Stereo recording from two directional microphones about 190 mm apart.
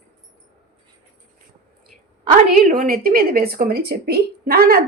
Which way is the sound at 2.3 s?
50° right (ahead or behind).